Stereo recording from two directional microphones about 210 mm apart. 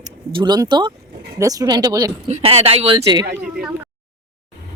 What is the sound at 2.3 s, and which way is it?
Speech, 30° right (ahead or behind).